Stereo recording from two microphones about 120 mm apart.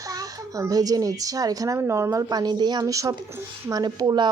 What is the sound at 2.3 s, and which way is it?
A woman's voice, 35° right (ahead or behind).